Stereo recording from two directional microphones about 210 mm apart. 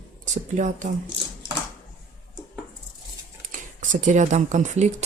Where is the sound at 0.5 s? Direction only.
35° right (ahead or behind).